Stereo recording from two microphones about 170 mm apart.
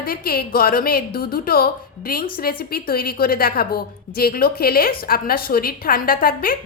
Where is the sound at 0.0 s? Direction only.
60° left (ahead or behind).